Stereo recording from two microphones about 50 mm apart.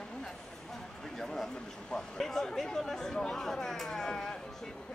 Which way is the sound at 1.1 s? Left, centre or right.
Centre.